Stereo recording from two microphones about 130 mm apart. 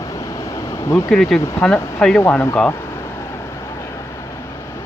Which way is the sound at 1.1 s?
Centre (ahead or behind).